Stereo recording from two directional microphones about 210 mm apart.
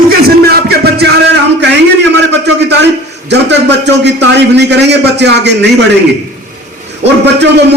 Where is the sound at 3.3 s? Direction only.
55° right (ahead or behind).